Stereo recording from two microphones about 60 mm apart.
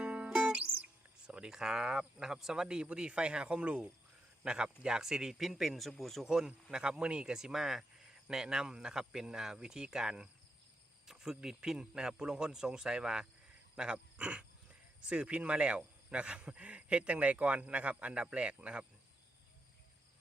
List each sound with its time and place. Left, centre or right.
0.0 s music: right
1.3 s speech: centre
6.2 s speech: centre